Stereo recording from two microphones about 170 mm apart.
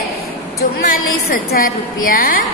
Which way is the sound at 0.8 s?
55° left (ahead or behind).